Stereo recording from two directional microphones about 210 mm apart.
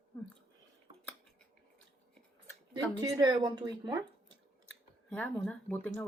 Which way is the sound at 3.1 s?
20° right (ahead or behind).